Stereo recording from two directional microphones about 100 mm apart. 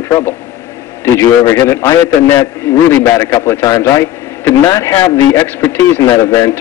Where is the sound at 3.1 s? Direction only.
45° left (ahead or behind).